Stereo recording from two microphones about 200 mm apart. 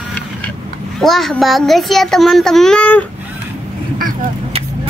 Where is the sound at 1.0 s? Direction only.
Centre (ahead or behind).